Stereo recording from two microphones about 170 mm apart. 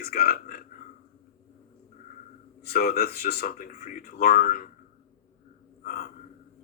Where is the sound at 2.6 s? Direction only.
65° left (ahead or behind).